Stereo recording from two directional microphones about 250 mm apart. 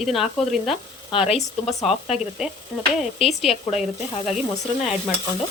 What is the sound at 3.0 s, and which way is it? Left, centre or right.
Speech, centre.